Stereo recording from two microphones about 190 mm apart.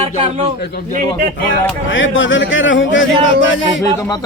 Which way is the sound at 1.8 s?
90° left.